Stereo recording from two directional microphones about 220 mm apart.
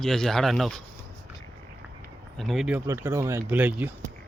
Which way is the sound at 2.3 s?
Centre (ahead or behind).